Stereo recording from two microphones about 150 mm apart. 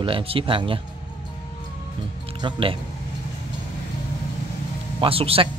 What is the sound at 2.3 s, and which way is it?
Speech, 35° right (ahead or behind).